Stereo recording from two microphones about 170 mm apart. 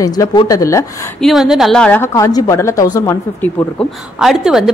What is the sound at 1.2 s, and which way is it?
A woman's voice, centre (ahead or behind).